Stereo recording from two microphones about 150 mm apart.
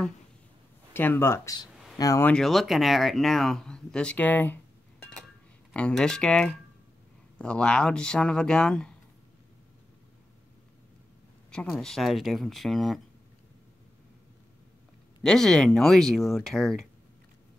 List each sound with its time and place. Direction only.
0.9 s speech: 15° left (ahead or behind)
2.2 s speech: 5° left (ahead or behind)
5.7 s speech: 5° left (ahead or behind)
11.5 s speech: 5° left (ahead or behind)
15.2 s speech: 5° left (ahead or behind)